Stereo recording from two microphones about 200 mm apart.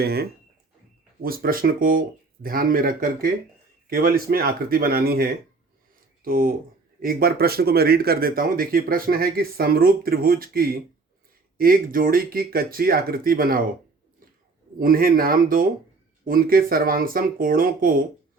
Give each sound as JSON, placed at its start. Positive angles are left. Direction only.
{"t": 0.0, "sound": "speech", "side_deg": -50}
{"t": 14.8, "sound": "speech", "side_deg": -45}